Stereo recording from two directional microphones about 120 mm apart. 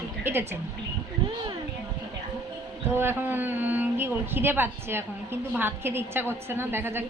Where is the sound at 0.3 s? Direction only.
20° right (ahead or behind).